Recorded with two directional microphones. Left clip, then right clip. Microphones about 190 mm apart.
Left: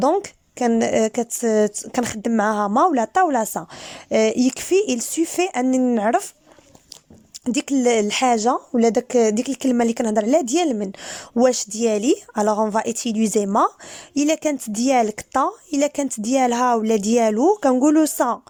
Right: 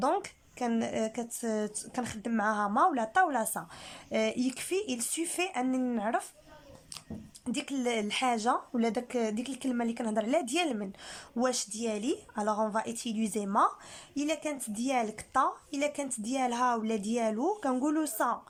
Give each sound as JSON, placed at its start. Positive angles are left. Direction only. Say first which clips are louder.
{"t": 0.0, "sound": "speech", "louder": "left 11 dB", "side_deg": 40}
{"t": 7.4, "sound": "speech", "louder": "left 14 dB", "side_deg": 45}